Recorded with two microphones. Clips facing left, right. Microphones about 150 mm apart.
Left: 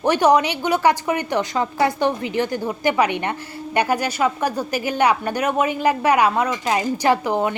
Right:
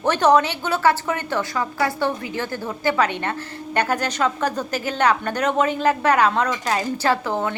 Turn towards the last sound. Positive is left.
turn(degrees=15)  # may be behind; listen again after turning